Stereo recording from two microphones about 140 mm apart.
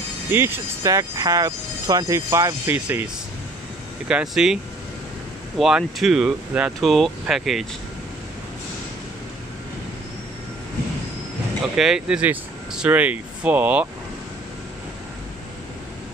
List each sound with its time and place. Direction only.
0.3 s speech: 15° right (ahead or behind)
4.1 s speech: 5° right (ahead or behind)
5.6 s speech: 5° right (ahead or behind)
11.7 s speech: 5° right (ahead or behind)